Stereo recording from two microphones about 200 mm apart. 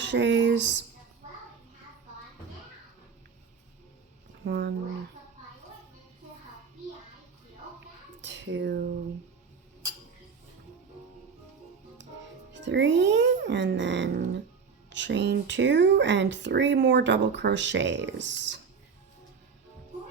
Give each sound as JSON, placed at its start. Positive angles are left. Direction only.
{"t": 0.0, "sound": "speech", "side_deg": -65}
{"t": 4.4, "sound": "speech", "side_deg": -55}
{"t": 8.2, "sound": "a sound", "side_deg": -65}
{"t": 12.5, "sound": "speech", "side_deg": -65}